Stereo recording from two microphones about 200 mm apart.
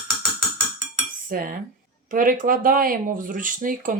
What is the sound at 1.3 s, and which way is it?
Speech, 45° right (ahead or behind).